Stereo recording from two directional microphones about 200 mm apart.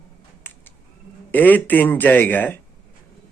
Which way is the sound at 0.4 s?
10° left (ahead or behind).